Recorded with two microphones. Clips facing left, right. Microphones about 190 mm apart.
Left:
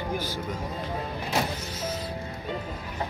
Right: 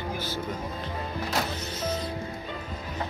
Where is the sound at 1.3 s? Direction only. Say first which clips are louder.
Left 3 dB; 15° left (ahead or behind).